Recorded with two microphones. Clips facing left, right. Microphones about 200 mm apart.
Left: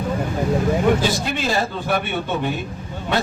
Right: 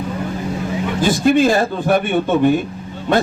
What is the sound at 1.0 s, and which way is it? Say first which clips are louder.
A man's voice: right 9 dB; 50° right (ahead or behind).